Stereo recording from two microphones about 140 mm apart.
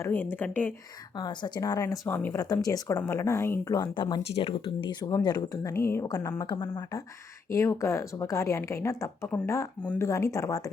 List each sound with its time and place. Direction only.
0.0 s speech: 15° left (ahead or behind)
1.1 s speech: 30° left (ahead or behind); by 2.4 s 15° left (ahead or behind)
2.4 s a woman's voice: 25° left (ahead or behind)
9.8 s speech: 10° left (ahead or behind)
10.1 s speech: 20° left (ahead or behind)